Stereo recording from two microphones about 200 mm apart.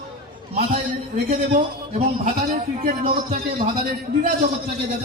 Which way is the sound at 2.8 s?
35° right (ahead or behind).